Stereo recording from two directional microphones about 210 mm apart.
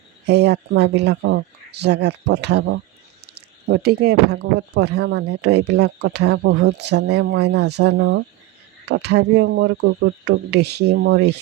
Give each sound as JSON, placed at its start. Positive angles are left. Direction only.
{"t": 0.3, "sound": "speech", "side_deg": -55}